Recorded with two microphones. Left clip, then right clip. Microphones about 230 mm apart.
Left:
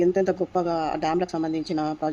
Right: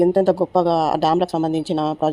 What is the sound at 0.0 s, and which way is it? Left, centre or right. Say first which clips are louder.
Speech: right 6 dB; right.